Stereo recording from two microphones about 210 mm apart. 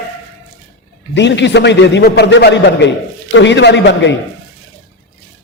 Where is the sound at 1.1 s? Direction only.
55° left (ahead or behind).